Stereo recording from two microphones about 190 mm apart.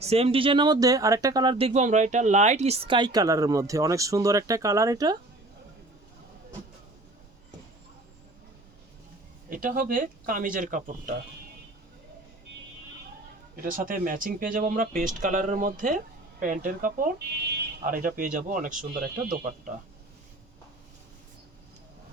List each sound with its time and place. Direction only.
0.0 s speech: 30° right (ahead or behind)
9.5 s speech: 45° right (ahead or behind)
13.6 s speech: 45° right (ahead or behind)